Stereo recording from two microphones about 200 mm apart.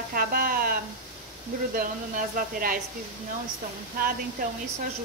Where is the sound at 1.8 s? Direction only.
45° right (ahead or behind).